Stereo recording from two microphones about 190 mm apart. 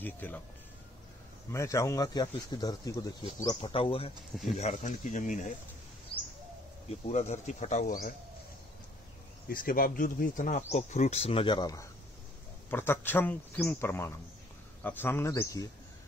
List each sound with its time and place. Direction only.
0.0 s speech: 10° left (ahead or behind)
1.5 s speech: 15° left (ahead or behind); by 5.5 s 40° left (ahead or behind)
6.9 s speech: 35° left (ahead or behind)
9.5 s speech: 50° left (ahead or behind); by 15.7 s 15° left (ahead or behind)